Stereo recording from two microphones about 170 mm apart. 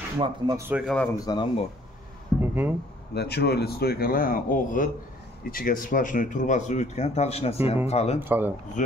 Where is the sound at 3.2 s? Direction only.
75° left (ahead or behind); by 8.2 s 35° left (ahead or behind).